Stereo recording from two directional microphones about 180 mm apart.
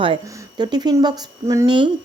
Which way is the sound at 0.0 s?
25° right (ahead or behind).